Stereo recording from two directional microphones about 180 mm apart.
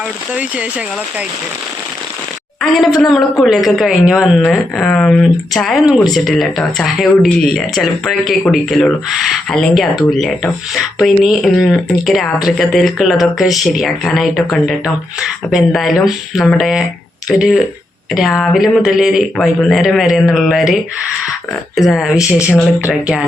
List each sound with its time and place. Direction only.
2.6 s speech: centre (ahead or behind)
21.8 s speech: centre (ahead or behind)